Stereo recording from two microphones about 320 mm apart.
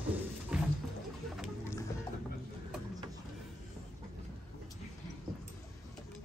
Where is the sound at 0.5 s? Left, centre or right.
Centre.